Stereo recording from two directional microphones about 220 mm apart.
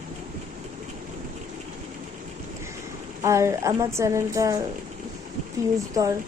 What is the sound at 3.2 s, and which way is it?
Speech, 15° right (ahead or behind).